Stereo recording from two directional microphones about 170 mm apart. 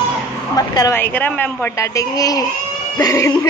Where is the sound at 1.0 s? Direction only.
10° left (ahead or behind).